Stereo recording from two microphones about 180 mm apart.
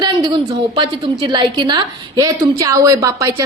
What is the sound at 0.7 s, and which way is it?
A woman's voice, 25° right (ahead or behind).